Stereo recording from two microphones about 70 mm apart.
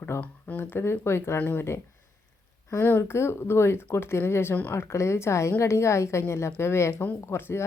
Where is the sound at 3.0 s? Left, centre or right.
Left.